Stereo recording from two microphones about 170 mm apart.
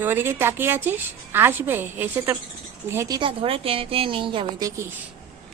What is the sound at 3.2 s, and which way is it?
A woman's voice, 30° right (ahead or behind).